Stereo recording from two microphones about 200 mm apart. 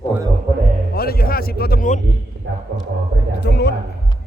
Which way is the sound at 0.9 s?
50° left (ahead or behind).